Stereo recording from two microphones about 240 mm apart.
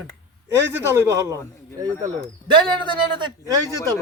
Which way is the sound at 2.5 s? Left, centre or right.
Centre.